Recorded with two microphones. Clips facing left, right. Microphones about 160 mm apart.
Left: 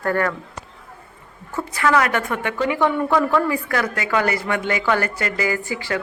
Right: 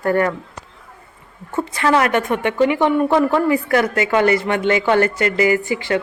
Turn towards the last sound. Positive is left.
turn(degrees=-20)  # may be behind; listen again after turning